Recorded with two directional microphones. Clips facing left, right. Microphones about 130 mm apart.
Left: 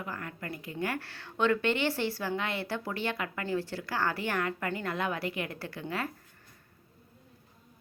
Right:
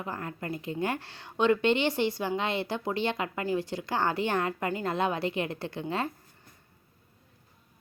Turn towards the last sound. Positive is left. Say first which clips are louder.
# right 4 dB
turn(degrees=-25)  # may be behind; listen again after turning